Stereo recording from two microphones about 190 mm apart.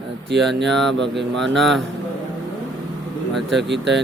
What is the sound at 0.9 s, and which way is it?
Speech, 65° right (ahead or behind).